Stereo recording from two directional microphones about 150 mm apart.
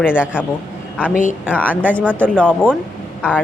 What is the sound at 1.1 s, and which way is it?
Speech, 60° left (ahead or behind).